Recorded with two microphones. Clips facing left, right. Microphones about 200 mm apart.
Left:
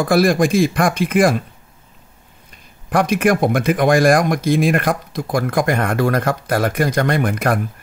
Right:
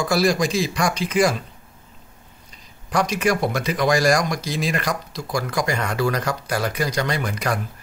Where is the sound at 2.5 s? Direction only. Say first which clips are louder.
Left 5 dB; 55° left (ahead or behind).